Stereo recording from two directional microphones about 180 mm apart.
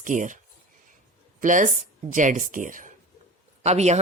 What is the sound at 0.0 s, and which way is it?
Speech, 45° right (ahead or behind).